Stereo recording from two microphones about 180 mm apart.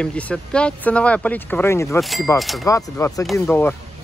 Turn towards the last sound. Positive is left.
turn(degrees=10)  # may be behind; listen again after turning